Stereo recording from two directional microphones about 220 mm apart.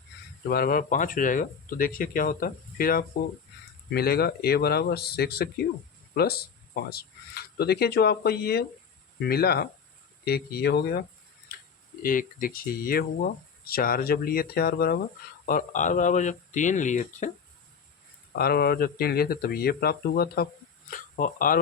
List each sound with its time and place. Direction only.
0.4 s speech: 40° left (ahead or behind)
12.0 s speech: 40° left (ahead or behind)
18.3 s speech: 45° left (ahead or behind)